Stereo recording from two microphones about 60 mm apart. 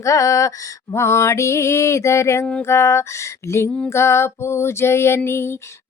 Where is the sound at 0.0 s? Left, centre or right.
Left.